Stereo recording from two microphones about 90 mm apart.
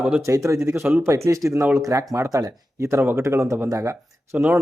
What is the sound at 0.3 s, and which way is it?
Speech, 35° right (ahead or behind).